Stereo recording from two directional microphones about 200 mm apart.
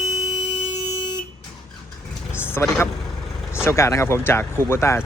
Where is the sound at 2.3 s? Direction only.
10° left (ahead or behind).